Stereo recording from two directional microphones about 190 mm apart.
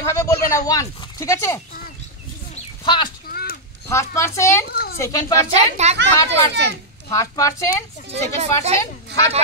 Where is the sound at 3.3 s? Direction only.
55° left (ahead or behind).